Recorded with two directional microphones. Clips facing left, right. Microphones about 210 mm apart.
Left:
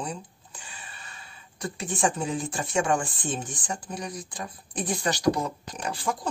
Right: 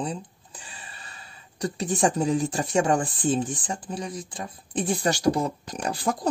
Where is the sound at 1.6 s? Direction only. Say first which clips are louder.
Right 4 dB; 35° right (ahead or behind).